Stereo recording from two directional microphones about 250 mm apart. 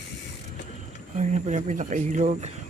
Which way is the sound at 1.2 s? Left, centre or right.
Right.